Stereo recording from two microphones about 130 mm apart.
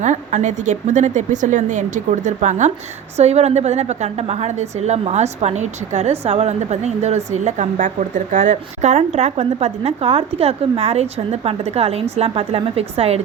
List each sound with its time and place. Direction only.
0.0 s a woman's voice: 70° right (ahead or behind); by 13.2 s 50° right (ahead or behind)